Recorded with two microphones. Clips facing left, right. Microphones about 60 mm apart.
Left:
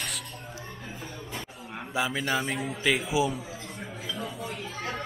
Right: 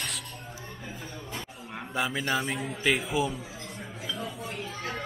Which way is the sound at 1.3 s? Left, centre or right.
Centre.